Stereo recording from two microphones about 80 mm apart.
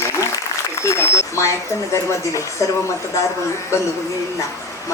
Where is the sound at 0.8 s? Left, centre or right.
Left.